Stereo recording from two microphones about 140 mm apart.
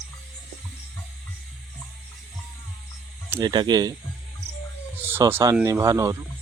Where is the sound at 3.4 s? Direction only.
30° right (ahead or behind).